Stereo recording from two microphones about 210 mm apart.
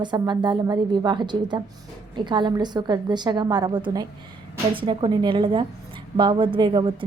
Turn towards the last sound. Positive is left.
turn(degrees=-25)  # may be behind; listen again after turning